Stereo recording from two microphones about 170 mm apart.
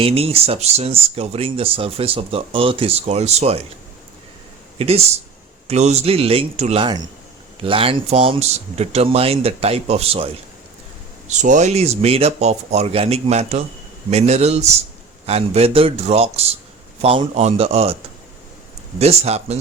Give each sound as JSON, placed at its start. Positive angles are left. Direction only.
{"t": 0.0, "sound": "speech", "side_deg": -35}
{"t": 4.8, "sound": "speech", "side_deg": -35}
{"t": 11.3, "sound": "speech", "side_deg": -45}
{"t": 18.9, "sound": "speech", "side_deg": -40}